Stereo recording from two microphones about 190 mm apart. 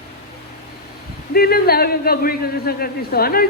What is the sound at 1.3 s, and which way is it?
A man's voice, 55° left (ahead or behind).